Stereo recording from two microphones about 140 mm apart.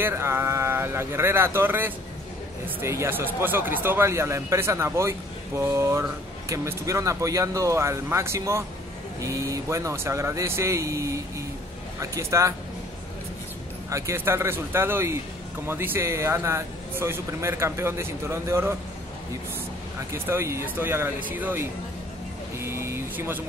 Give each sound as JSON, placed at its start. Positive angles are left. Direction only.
{"t": 0.0, "sound": "speech", "side_deg": -15}
{"t": 13.8, "sound": "speech", "side_deg": -20}
{"t": 20.1, "sound": "speech", "side_deg": -20}